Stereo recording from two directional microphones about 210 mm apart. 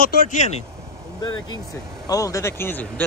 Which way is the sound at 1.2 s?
20° left (ahead or behind).